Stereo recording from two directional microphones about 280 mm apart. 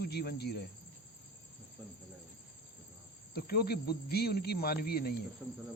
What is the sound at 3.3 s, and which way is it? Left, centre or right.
A man's voice, left.